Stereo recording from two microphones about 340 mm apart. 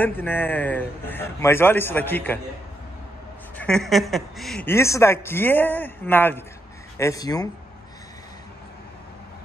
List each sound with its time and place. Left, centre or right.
0.0 s speech: centre
3.5 s speech: centre